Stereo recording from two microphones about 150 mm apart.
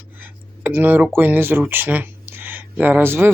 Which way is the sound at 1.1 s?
15° right (ahead or behind).